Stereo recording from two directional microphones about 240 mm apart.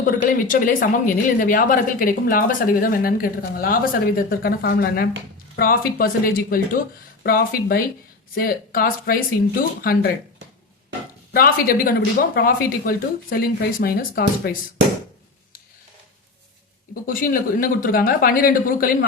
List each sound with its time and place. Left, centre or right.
0.0 s speech: left
11.3 s speech: left
16.9 s speech: left